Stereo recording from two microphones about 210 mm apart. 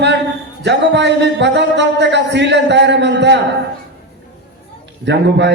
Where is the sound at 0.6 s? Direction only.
55° right (ahead or behind).